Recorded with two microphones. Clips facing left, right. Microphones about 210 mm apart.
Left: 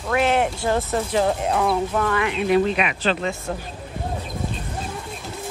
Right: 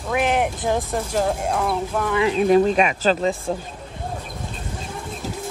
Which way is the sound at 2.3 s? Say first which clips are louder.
Right 5 dB; 40° right (ahead or behind).